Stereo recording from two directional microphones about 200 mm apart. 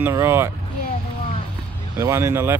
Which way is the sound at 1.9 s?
15° right (ahead or behind).